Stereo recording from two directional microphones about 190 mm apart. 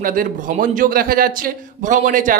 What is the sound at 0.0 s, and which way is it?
A man's voice, 45° right (ahead or behind).